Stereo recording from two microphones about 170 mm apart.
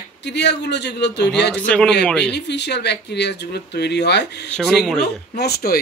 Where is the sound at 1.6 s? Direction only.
5° left (ahead or behind).